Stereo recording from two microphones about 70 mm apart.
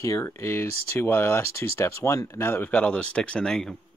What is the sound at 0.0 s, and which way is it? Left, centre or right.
Speech, left.